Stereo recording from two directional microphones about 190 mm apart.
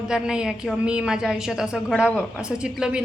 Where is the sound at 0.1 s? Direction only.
5° right (ahead or behind).